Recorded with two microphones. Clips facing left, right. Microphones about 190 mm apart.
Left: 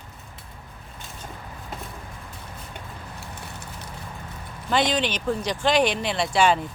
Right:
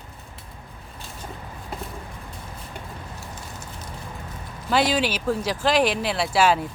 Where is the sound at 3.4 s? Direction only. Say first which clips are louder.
Even; 65° left (ahead or behind).